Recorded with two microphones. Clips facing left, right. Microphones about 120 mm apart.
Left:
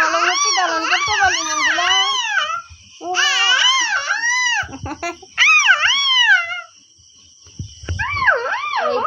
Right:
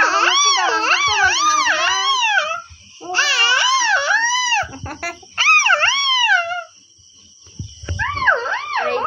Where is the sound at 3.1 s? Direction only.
60° right (ahead or behind); by 4.6 s 85° right.